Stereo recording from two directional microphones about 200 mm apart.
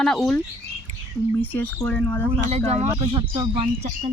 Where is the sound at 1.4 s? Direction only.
10° left (ahead or behind).